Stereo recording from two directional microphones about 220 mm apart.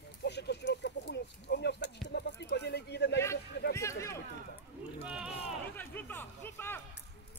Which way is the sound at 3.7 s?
15° left (ahead or behind).